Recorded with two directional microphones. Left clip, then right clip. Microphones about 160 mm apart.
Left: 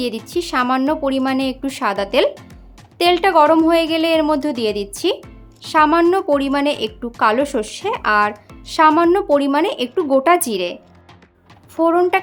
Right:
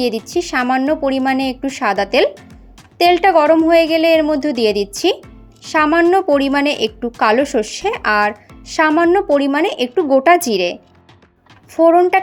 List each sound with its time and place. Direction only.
0.0 s speech: 10° right (ahead or behind)